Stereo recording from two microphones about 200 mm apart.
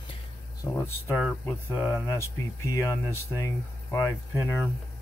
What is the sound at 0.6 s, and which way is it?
Speech, 10° left (ahead or behind).